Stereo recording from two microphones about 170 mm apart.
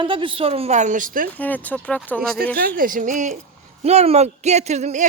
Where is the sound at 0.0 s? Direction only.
30° right (ahead or behind); by 1.3 s 55° right (ahead or behind).